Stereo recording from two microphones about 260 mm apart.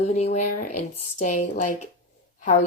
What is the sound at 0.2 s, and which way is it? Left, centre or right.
Speech, left.